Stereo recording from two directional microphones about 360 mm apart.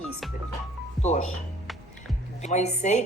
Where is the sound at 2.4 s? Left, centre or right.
Centre.